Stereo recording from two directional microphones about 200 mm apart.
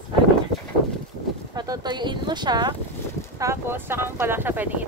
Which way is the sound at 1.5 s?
20° right (ahead or behind).